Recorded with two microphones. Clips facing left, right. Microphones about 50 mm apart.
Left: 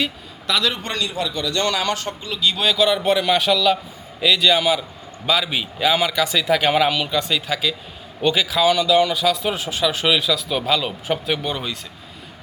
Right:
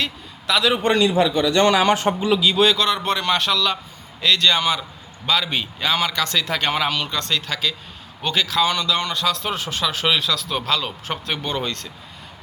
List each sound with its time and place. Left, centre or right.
0.0 s a man's voice: centre
0.8 s a man's voice: right
2.4 s a man's voice: centre